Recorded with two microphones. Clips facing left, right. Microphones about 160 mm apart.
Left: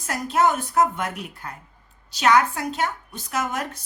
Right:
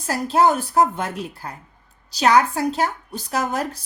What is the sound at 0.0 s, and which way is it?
Speech, 30° right (ahead or behind).